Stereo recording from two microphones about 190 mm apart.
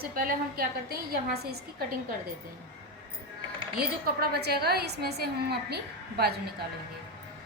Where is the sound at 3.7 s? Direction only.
55° right (ahead or behind).